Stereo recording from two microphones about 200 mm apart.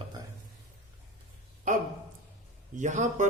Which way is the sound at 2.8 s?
40° right (ahead or behind).